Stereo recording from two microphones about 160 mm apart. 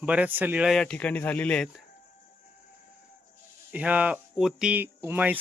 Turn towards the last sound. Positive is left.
turn(degrees=-10)  # may be behind; listen again after turning